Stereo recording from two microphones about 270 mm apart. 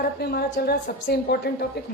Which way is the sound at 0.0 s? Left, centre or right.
Left.